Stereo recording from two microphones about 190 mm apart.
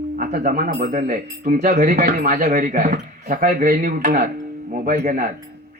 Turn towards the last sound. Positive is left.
turn(degrees=-40)  # may be behind; listen again after turning